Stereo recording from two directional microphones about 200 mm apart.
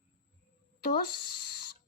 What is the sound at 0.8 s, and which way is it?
Speech, 50° left (ahead or behind).